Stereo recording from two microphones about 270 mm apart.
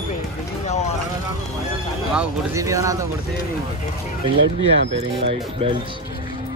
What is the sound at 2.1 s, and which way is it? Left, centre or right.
Speech, centre.